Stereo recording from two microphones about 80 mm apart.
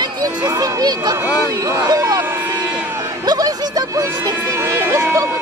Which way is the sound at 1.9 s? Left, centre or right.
Right.